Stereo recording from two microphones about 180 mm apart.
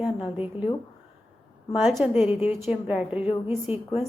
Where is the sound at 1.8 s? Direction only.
5° right (ahead or behind).